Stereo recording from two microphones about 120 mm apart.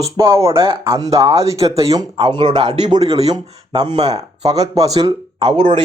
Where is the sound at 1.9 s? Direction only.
40° right (ahead or behind).